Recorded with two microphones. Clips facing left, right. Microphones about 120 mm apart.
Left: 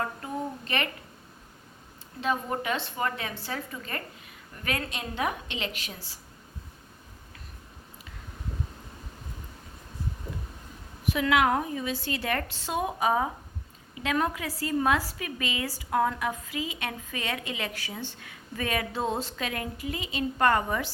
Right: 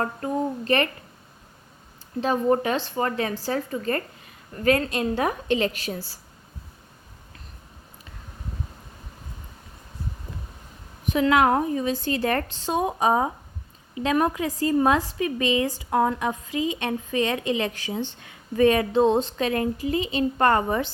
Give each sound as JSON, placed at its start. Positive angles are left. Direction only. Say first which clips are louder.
{"t": 0.0, "sound": "a woman's voice", "louder": "right 6 dB", "side_deg": -40}
{"t": 2.2, "sound": "a woman's voice", "louder": "right 7 dB", "side_deg": -35}
{"t": 11.1, "sound": "a woman's voice", "louder": "right 5 dB", "side_deg": -30}